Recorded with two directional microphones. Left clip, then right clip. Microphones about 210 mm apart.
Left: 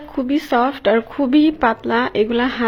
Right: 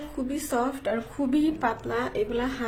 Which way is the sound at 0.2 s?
35° left (ahead or behind).